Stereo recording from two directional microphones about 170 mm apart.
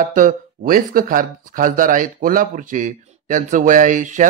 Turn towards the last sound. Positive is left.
turn(degrees=-50)  # may be behind; listen again after turning